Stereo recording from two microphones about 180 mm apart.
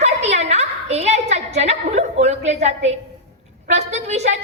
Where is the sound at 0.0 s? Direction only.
40° right (ahead or behind).